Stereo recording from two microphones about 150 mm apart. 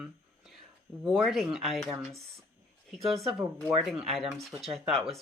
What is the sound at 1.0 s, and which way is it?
Speech, centre (ahead or behind).